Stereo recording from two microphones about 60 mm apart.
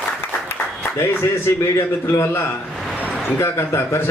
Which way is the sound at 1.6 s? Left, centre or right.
Left.